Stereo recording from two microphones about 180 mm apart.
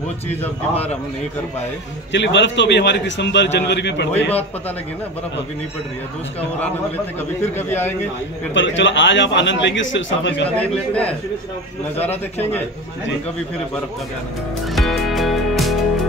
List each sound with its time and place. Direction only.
0.4 s a man's voice: 35° left (ahead or behind)
2.1 s a man's voice: 85° left
7.5 s a man's voice: 10° left (ahead or behind)
8.5 s a man's voice: 90° left
10.5 s a man's voice: 10° left (ahead or behind)
14.7 s music: centre (ahead or behind)